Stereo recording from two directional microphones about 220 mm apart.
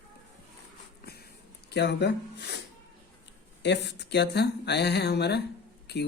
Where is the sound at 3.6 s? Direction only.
50° left (ahead or behind).